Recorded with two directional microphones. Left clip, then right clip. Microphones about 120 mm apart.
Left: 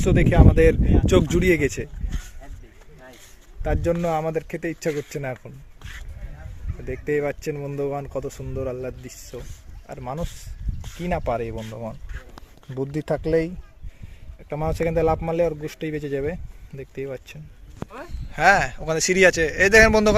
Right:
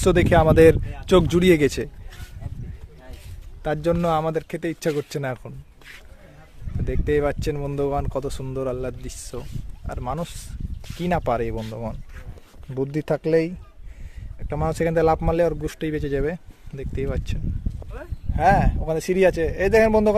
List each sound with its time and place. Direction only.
0.0 s speech: 70° right (ahead or behind)
1.0 s speech: 20° right (ahead or behind)
1.4 s speech: 35° right (ahead or behind)
4.0 s speech: 20° right (ahead or behind); by 5.5 s 35° right (ahead or behind)
6.8 s speech: 25° right (ahead or behind)
12.7 s a man's voice: 15° right (ahead or behind)
14.5 s speech: 20° right (ahead or behind)
18.3 s a man's voice: 15° right (ahead or behind)